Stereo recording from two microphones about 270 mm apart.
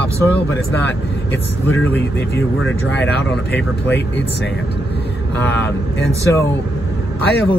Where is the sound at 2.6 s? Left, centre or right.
Left.